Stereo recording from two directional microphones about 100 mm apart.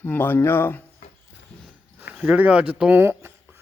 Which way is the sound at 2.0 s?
10° right (ahead or behind).